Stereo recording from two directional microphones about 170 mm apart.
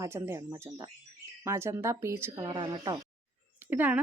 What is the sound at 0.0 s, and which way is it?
Speech, 15° right (ahead or behind).